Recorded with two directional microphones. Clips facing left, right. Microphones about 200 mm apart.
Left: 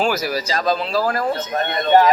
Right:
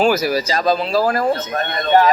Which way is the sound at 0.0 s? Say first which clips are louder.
Right 4 dB; 5° right (ahead or behind).